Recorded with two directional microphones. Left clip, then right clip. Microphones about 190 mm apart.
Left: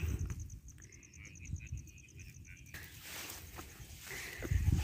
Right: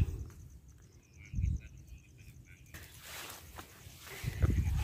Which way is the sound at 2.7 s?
Centre (ahead or behind).